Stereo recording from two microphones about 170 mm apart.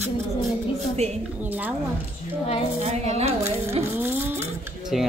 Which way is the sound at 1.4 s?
10° right (ahead or behind).